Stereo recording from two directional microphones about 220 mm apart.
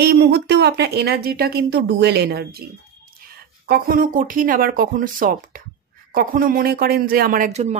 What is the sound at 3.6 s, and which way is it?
Speech, 45° right (ahead or behind).